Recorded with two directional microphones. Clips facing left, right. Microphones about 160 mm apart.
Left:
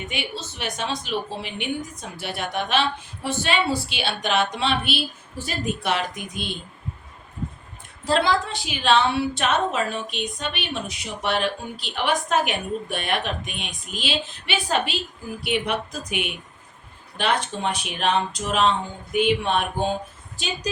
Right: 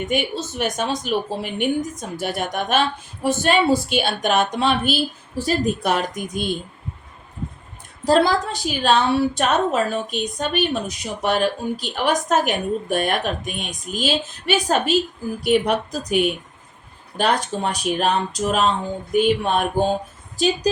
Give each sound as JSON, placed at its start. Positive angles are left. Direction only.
{"t": 0.0, "sound": "a woman's voice", "side_deg": -45}
{"t": 8.0, "sound": "a woman's voice", "side_deg": -40}